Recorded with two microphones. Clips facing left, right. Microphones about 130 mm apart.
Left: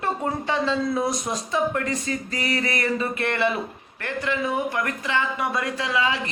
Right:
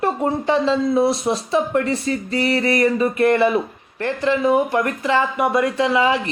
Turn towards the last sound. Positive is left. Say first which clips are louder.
# right 7 dB
turn(degrees=-25)  # may be behind; listen again after turning